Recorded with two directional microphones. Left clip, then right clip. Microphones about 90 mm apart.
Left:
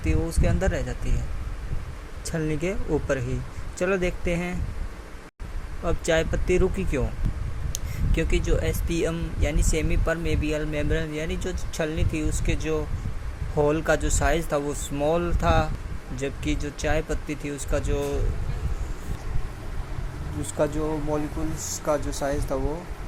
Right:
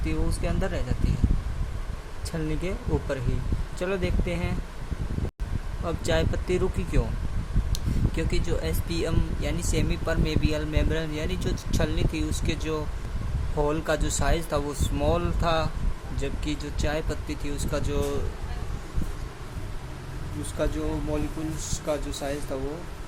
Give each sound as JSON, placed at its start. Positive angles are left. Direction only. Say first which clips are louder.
{"t": 0.1, "sound": "speech", "louder": "left 4 dB", "side_deg": 20}
{"t": 2.3, "sound": "speech", "louder": "left 4 dB", "side_deg": 25}
{"t": 5.8, "sound": "speech", "louder": "left 3 dB", "side_deg": 20}
{"t": 20.6, "sound": "speech", "louder": "left 4 dB", "side_deg": 25}
{"t": 21.8, "sound": "speech", "louder": "left 4 dB", "side_deg": 25}